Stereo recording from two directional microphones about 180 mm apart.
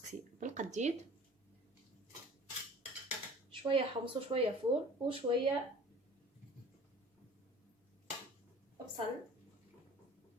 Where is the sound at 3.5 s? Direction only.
30° right (ahead or behind).